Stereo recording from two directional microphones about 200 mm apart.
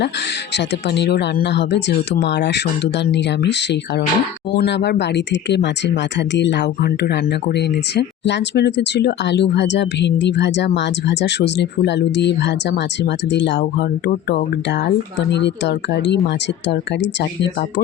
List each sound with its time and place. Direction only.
0.5 s speech: 60° left (ahead or behind)